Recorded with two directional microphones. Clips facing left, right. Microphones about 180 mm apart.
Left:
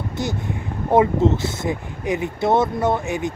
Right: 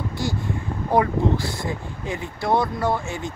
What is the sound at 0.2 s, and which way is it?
Speech, 20° left (ahead or behind).